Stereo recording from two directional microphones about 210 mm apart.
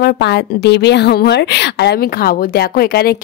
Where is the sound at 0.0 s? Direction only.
50° left (ahead or behind).